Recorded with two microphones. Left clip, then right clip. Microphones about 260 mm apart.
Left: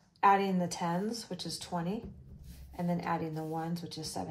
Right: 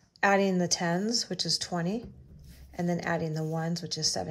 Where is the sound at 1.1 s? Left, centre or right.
Right.